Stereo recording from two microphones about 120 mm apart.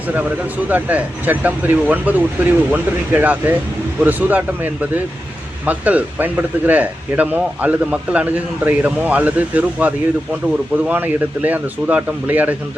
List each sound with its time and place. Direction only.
0.7 s speech: 15° right (ahead or behind)